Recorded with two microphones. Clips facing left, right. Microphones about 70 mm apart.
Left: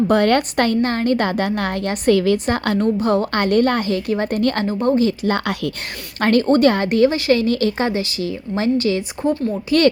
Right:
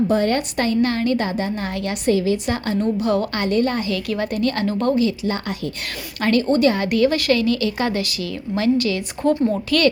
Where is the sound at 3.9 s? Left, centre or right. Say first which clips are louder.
Left 3 dB; left.